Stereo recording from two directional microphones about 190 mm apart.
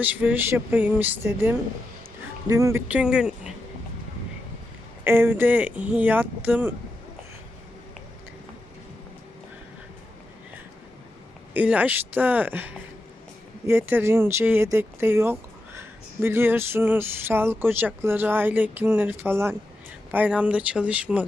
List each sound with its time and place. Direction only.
0.0 s speech: 10° right (ahead or behind)
2.8 s speech: 5° right (ahead or behind)
5.0 s speech: 10° right (ahead or behind)
11.5 s speech: 10° right (ahead or behind)